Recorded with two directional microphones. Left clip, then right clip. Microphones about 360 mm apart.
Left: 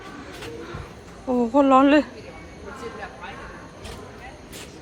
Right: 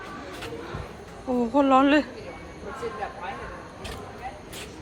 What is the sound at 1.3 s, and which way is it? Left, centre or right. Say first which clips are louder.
Speech: left 3 dB; centre.